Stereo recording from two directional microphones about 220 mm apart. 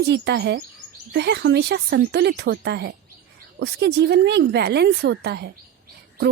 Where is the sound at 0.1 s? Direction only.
50° right (ahead or behind).